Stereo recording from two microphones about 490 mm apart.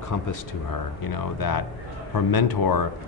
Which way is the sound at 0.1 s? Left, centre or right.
Left.